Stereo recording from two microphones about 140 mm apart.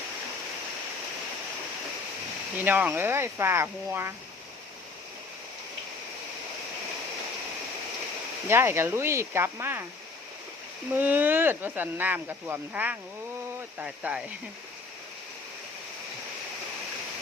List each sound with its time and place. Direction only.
2.6 s speech: 15° right (ahead or behind)
8.4 s speech: 15° right (ahead or behind)
10.9 s speech: 15° right (ahead or behind)